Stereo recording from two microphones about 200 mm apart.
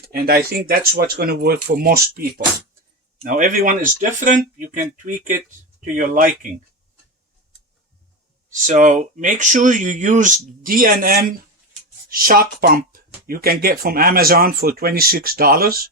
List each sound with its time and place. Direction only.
0.1 s speech: 50° right (ahead or behind)
3.2 s speech: 40° right (ahead or behind)
8.6 s speech: 40° right (ahead or behind)